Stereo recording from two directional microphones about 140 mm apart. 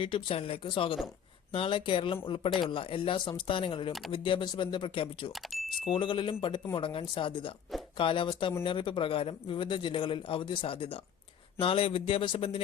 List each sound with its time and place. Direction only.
0.0 s a man's voice: 40° left (ahead or behind)
5.3 s keys jangling: centre (ahead or behind)
5.9 s a man's voice: 35° left (ahead or behind)